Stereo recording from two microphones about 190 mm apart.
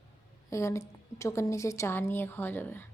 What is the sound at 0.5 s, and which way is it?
A woman's voice, 15° left (ahead or behind).